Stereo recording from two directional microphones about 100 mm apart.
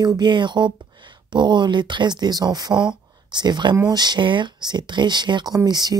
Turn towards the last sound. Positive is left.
turn(degrees=-40)  # may be behind; listen again after turning